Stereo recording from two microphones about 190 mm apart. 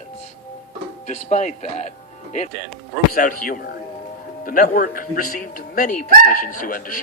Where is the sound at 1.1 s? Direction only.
35° left (ahead or behind).